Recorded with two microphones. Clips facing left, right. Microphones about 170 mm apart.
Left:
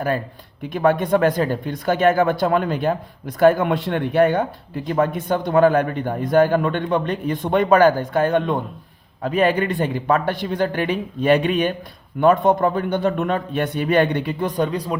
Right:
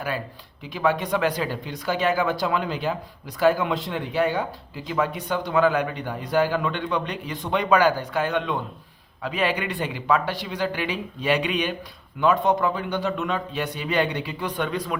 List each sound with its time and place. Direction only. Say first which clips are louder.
0.6 s speech: left 5 dB; 55° left (ahead or behind); by 14.9 s 35° left (ahead or behind)